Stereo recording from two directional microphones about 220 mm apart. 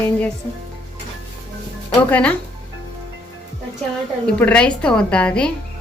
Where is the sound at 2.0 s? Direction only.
5° left (ahead or behind).